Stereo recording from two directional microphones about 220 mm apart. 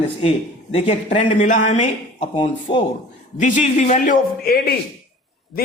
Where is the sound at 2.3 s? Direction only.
25° left (ahead or behind).